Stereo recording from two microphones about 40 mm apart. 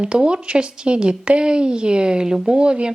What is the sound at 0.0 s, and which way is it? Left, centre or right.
A woman's voice, right.